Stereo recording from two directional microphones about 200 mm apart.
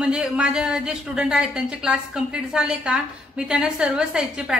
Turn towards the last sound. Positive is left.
turn(degrees=-5)  # may be behind; listen again after turning